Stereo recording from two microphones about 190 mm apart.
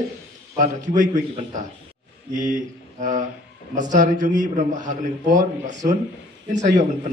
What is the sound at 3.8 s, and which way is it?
A man's voice, 40° right (ahead or behind).